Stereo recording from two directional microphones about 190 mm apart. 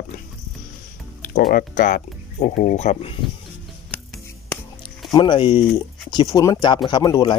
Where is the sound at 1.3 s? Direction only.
50° left (ahead or behind); by 3.1 s 35° left (ahead or behind).